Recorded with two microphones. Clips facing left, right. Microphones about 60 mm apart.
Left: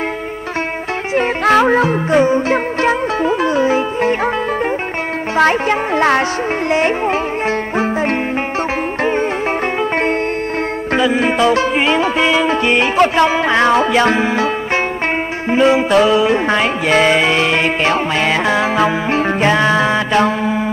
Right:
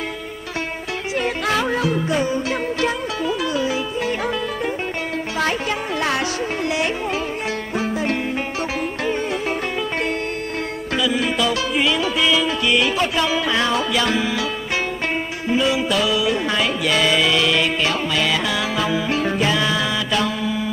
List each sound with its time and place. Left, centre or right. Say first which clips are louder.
1.1 s music: left 9 dB; left
5.4 s music: left 10 dB; left
11.0 s music: left 6 dB; left
15.5 s music: left 8 dB; left